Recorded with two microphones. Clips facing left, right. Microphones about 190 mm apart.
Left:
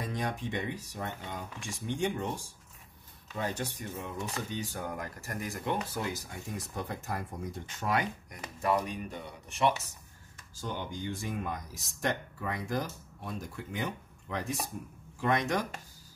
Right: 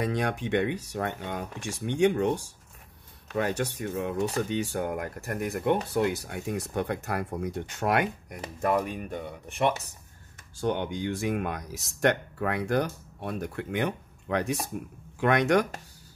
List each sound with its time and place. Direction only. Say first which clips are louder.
0.0 s speech: right 6 dB; 70° right (ahead or behind)
8.5 s speech: right 3 dB; 55° right (ahead or behind); by 15.6 s 70° right (ahead or behind)